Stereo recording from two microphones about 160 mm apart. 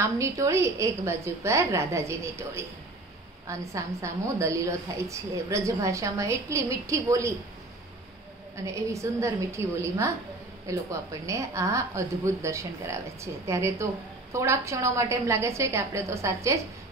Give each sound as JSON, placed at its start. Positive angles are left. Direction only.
{"t": 0.0, "sound": "a woman's voice", "side_deg": -20}
{"t": 8.6, "sound": "a woman's voice", "side_deg": -20}